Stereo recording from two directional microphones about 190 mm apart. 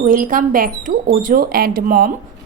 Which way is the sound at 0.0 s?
45° right (ahead or behind).